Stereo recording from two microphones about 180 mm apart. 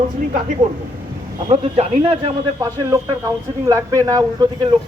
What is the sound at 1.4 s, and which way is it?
Speech, 30° right (ahead or behind).